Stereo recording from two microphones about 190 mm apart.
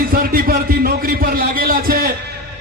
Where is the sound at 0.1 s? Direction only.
50° right (ahead or behind).